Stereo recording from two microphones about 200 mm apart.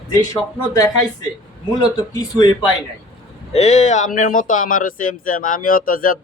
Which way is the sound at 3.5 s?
35° left (ahead or behind).